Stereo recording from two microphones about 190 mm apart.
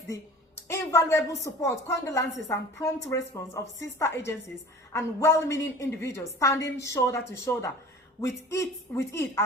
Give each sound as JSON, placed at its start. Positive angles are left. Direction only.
{"t": 0.1, "sound": "a woman's voice", "side_deg": 15}